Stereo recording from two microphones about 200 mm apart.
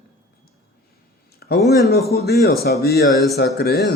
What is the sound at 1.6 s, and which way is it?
Mantra, centre (ahead or behind).